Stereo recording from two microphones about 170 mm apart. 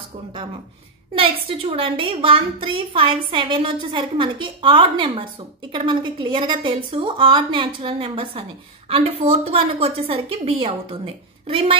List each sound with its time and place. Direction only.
1.1 s a woman's voice: 30° right (ahead or behind)